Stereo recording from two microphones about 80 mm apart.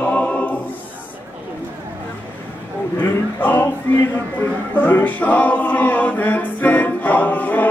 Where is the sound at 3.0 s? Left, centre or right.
Left.